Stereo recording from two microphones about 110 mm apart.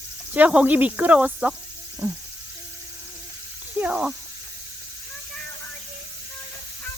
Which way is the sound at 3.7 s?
10° right (ahead or behind).